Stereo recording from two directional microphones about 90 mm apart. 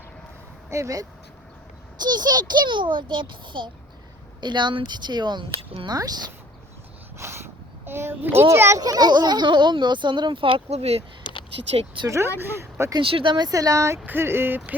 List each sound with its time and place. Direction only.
0.7 s speech: 35° right (ahead or behind)
2.0 s speech: 50° right (ahead or behind)
5.5 s speech: 90° right
5.9 s speech: 45° right (ahead or behind)
7.2 s a sound: 30° right (ahead or behind)
7.9 s speech: 25° right (ahead or behind)
8.8 s speech: 45° right (ahead or behind); by 10.6 s 80° right
11.2 s a sound: 65° left (ahead or behind)
12.0 s speech: 30° right (ahead or behind)
13.0 s speech: 90° right
13.3 s speech: 45° right (ahead or behind)
14.0 s speech: 25° right (ahead or behind)